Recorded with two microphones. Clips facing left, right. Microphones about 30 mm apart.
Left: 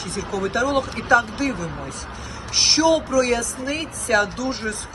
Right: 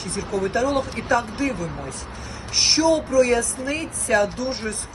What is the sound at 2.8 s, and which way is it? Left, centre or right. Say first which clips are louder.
Speech: right 1 dB; left.